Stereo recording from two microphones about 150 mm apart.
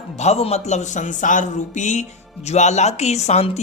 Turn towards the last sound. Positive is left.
turn(degrees=45)  # may be behind; listen again after turning